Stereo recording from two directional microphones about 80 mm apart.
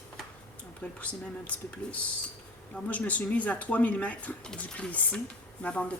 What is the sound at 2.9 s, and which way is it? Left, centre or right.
Speech, centre.